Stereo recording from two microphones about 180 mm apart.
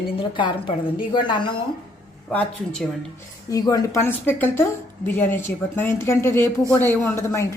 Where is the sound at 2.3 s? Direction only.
5° left (ahead or behind).